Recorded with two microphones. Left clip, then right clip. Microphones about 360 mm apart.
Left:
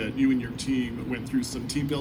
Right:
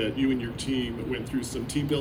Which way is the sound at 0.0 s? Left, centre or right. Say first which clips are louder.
Left 1 dB; centre.